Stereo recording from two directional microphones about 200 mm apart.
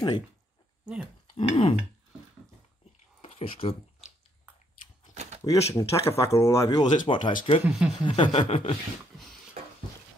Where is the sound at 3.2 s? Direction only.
30° left (ahead or behind).